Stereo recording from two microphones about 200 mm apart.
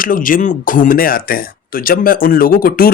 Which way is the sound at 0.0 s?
45° left (ahead or behind).